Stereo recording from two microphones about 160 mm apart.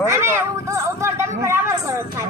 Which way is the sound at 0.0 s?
15° right (ahead or behind).